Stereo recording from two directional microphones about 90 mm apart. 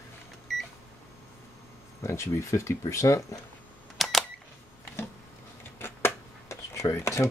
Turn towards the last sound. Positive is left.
turn(degrees=35)  # may be behind; listen again after turning